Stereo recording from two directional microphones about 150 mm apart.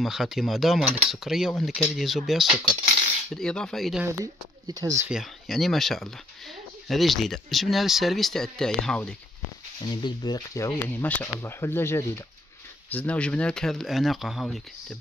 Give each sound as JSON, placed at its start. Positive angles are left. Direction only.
{"t": 0.0, "sound": "speech", "side_deg": 0}
{"t": 4.0, "sound": "speech", "side_deg": -25}
{"t": 5.0, "sound": "speech", "side_deg": 0}
{"t": 9.8, "sound": "speech", "side_deg": 30}